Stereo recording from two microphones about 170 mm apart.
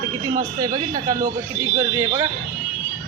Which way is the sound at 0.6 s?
20° right (ahead or behind).